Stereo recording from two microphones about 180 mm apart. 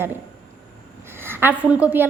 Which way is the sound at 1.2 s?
10° right (ahead or behind).